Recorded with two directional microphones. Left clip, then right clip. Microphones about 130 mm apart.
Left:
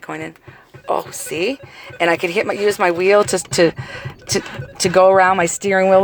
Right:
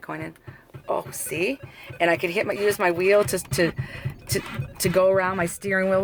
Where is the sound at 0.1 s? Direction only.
20° left (ahead or behind).